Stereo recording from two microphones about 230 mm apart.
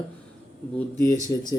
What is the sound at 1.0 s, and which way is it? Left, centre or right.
Speech, centre.